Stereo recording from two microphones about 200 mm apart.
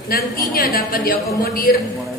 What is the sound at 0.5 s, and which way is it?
A woman's voice, 45° left (ahead or behind).